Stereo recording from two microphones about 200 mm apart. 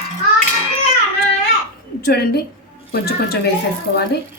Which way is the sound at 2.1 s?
50° left (ahead or behind).